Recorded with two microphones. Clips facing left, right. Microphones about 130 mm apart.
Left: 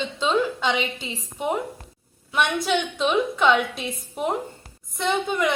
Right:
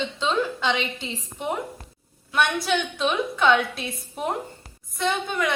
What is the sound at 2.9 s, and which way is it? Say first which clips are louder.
A woman's voice: left 3 dB; 15° left (ahead or behind).